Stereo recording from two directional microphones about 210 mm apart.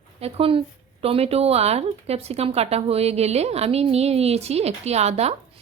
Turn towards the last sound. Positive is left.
turn(degrees=-30)  # may be behind; listen again after turning